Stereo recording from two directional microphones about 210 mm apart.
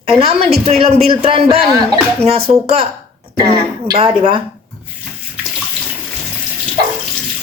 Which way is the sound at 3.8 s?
25° right (ahead or behind).